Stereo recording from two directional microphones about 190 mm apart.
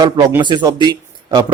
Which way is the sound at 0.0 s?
15° right (ahead or behind).